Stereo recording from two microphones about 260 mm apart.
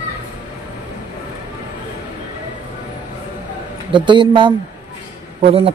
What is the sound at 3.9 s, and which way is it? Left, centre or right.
Speech, centre.